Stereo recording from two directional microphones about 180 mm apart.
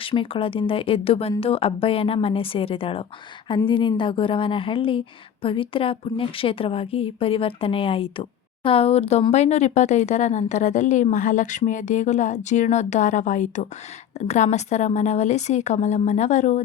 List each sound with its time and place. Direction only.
0.0 s a woman's voice: 30° left (ahead or behind)